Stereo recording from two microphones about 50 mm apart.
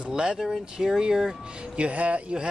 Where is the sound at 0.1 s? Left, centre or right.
Centre.